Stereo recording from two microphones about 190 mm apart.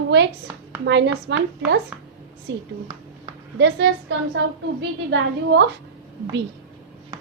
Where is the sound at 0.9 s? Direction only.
65° right (ahead or behind).